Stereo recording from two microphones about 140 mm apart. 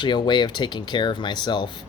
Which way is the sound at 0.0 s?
35° left (ahead or behind).